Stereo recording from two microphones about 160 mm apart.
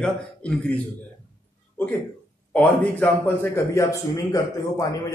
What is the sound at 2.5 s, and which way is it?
A man's voice, 10° left (ahead or behind).